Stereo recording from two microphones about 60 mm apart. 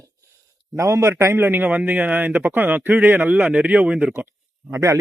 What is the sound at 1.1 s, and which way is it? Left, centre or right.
Speech, right.